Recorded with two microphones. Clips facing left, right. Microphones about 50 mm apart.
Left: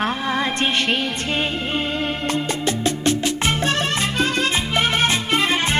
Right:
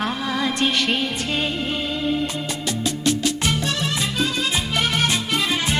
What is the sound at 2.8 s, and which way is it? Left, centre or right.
Music, left.